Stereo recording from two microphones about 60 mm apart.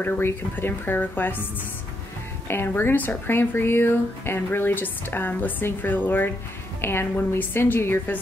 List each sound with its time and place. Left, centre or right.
0.2 s speech: left
2.4 s a woman's voice: left